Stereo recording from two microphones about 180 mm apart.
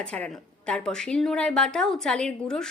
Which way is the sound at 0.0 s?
5° left (ahead or behind).